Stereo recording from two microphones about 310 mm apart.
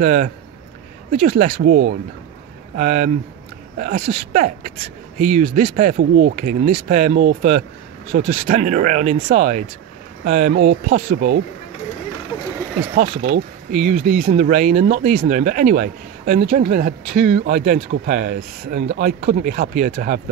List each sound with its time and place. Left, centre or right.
0.0 s speech: right
12.9 s speech: right
17.1 s a man's voice: right
17.4 s speech: right